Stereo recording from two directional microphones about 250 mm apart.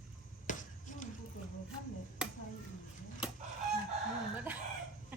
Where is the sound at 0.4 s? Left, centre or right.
Left.